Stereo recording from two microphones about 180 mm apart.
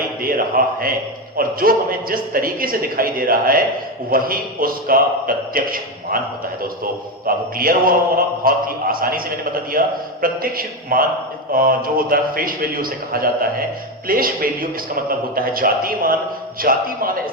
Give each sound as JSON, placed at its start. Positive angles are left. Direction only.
{"t": 0.2, "sound": "a man's voice", "side_deg": -55}
{"t": 7.3, "sound": "a man's voice", "side_deg": -55}